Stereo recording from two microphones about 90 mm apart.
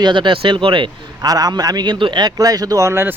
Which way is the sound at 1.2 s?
45° right (ahead or behind).